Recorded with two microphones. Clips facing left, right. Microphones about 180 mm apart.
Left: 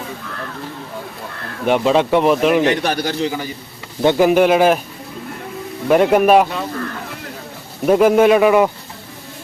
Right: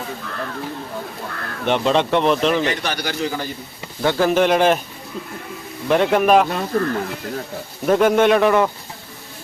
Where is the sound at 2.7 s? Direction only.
55° left (ahead or behind).